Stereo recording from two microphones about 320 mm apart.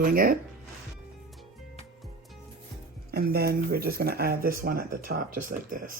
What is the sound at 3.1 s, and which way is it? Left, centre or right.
Speech, right.